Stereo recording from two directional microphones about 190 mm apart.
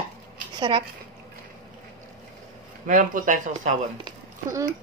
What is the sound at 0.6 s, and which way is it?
Speech, 25° right (ahead or behind).